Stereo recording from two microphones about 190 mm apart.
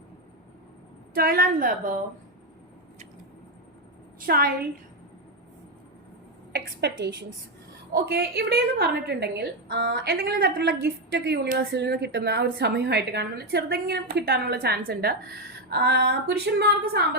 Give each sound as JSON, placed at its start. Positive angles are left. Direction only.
{"t": 1.1, "sound": "a woman's voice", "side_deg": -50}
{"t": 4.2, "sound": "a woman's voice", "side_deg": -50}
{"t": 6.5, "sound": "a woman's voice", "side_deg": -60}
{"t": 7.9, "sound": "a woman's voice", "side_deg": -55}